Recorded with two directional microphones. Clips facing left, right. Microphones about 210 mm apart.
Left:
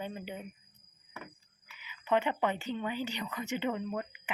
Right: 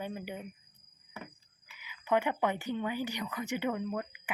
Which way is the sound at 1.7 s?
15° right (ahead or behind).